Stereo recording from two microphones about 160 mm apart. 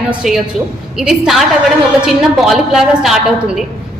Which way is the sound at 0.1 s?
5° right (ahead or behind).